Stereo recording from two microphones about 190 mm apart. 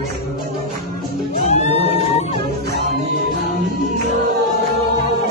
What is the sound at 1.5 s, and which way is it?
Music, 35° left (ahead or behind).